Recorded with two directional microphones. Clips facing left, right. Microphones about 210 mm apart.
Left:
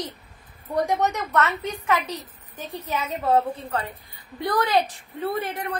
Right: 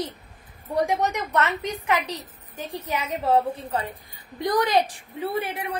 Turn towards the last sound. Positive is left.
turn(degrees=-10)  # may be behind; listen again after turning